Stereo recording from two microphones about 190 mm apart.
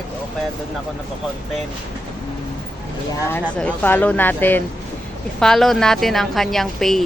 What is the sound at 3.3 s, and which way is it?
Speech, 10° left (ahead or behind).